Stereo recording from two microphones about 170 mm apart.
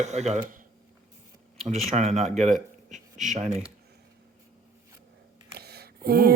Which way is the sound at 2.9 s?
45° right (ahead or behind).